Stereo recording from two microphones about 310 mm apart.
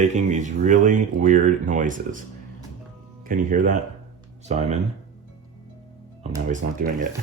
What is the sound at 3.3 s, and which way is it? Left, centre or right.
Speech, right.